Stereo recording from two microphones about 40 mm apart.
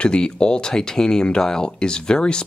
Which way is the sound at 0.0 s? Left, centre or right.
Left.